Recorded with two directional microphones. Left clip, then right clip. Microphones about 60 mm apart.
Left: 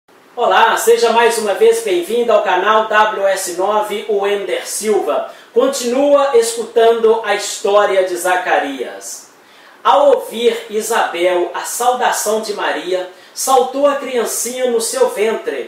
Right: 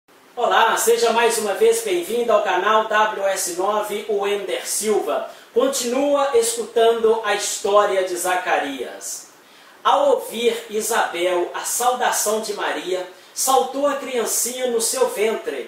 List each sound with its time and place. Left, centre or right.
0.4 s speech: centre
9.8 s speech: centre
14.1 s speech: centre